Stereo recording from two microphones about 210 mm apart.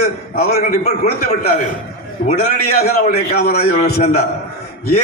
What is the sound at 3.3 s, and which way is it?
Speech, 50° left (ahead or behind).